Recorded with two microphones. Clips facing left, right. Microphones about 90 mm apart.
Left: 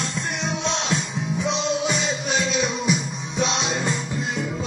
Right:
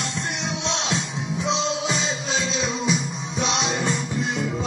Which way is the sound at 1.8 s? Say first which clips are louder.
Left 1 dB; 30° right (ahead or behind).